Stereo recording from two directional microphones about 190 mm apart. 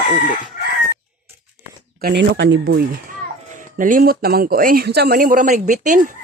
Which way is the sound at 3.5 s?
45° right (ahead or behind).